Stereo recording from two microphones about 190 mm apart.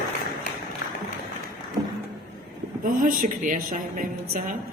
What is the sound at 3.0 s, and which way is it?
Speech, 45° right (ahead or behind).